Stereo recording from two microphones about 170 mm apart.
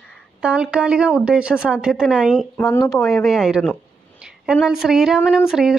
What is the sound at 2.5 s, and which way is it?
Speech, 15° left (ahead or behind).